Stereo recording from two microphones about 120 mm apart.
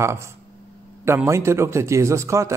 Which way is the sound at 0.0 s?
20° right (ahead or behind).